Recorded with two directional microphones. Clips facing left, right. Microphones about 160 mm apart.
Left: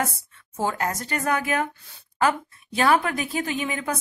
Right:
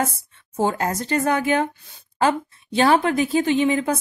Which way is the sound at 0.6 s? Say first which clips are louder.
Right 4 dB; 25° right (ahead or behind).